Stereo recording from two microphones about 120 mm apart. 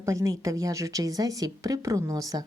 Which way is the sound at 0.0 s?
25° right (ahead or behind).